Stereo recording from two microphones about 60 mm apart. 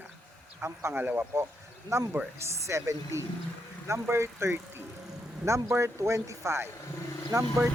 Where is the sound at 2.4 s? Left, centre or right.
Right.